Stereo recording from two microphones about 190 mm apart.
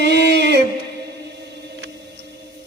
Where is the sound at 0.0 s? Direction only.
60° right (ahead or behind).